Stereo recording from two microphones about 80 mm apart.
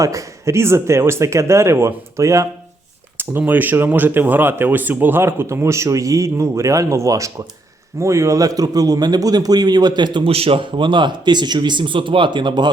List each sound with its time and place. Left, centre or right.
0.0 s speech: right
3.2 s a man's voice: right